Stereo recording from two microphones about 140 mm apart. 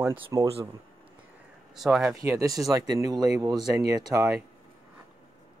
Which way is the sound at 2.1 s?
20° right (ahead or behind).